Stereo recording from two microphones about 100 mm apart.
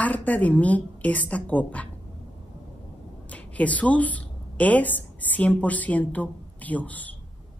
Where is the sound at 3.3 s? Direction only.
15° left (ahead or behind).